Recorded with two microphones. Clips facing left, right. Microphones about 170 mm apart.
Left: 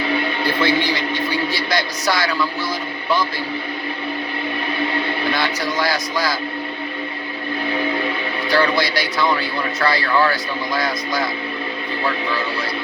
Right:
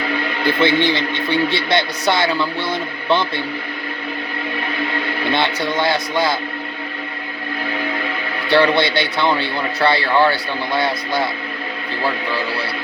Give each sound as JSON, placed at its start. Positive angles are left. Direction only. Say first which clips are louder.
{"t": 0.6, "sound": "speech", "louder": "right 3 dB", "side_deg": -25}
{"t": 5.3, "sound": "speech", "louder": "right 2 dB", "side_deg": -25}
{"t": 8.4, "sound": "speech", "louder": "right 4 dB", "side_deg": -30}